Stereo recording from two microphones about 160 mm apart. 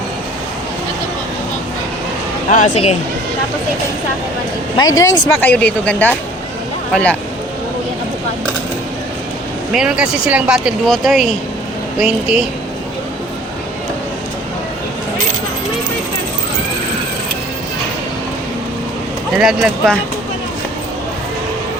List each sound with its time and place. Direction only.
2.5 s speech: 50° left (ahead or behind)
4.8 s speech: 25° left (ahead or behind)
5.4 s speech: 10° left (ahead or behind)
9.7 s speech: 5° right (ahead or behind)
19.4 s speech: centre (ahead or behind)